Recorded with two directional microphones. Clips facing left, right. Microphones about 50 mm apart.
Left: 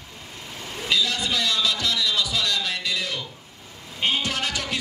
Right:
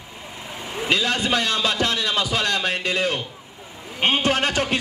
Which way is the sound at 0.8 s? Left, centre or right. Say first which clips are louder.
Right 3 dB; right.